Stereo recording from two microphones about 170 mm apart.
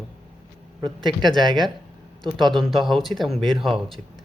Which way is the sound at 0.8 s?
25° right (ahead or behind).